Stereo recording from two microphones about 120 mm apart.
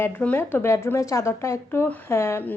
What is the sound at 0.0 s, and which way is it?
A woman's voice, 15° left (ahead or behind).